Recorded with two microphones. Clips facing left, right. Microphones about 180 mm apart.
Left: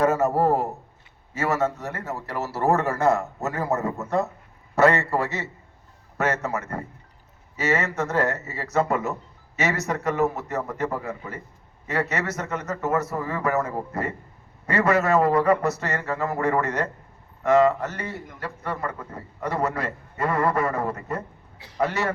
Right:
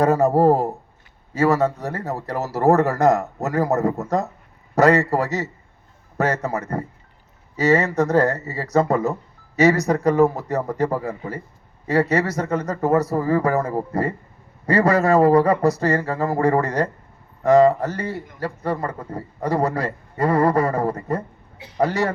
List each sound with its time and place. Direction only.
0.0 s a man's voice: 35° right (ahead or behind)